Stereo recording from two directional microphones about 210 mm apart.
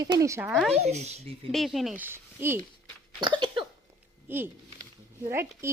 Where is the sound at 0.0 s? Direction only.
15° right (ahead or behind).